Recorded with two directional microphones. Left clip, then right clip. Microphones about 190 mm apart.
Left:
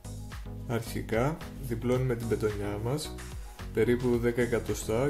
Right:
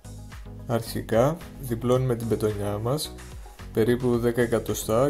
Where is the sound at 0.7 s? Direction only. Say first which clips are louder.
Right 6 dB; 30° right (ahead or behind).